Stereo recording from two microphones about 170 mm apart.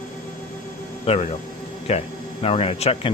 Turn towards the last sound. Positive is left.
turn(degrees=35)  # may be behind; listen again after turning